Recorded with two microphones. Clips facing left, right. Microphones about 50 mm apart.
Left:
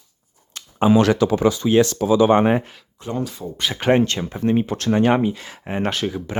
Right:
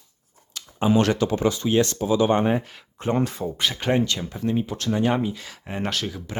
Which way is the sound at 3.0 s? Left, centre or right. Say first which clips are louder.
Right 3 dB; right.